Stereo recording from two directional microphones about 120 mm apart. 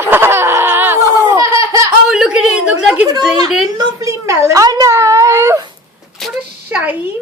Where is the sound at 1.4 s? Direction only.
25° right (ahead or behind).